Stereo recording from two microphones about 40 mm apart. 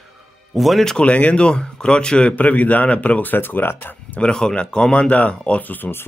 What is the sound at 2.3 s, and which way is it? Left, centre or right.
A man's voice, left.